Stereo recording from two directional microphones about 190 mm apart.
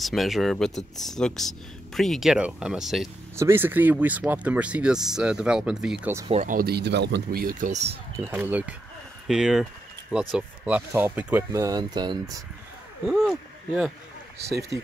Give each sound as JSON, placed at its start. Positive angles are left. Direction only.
{"t": 0.0, "sound": "speech", "side_deg": 0}
{"t": 3.3, "sound": "speech", "side_deg": -15}
{"t": 6.4, "sound": "speech", "side_deg": -50}
{"t": 8.2, "sound": "speech", "side_deg": -10}
{"t": 13.0, "sound": "speech", "side_deg": 0}
{"t": 14.5, "sound": "speech", "side_deg": -15}